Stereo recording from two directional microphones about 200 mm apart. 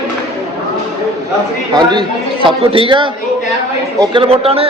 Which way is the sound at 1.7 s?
20° right (ahead or behind).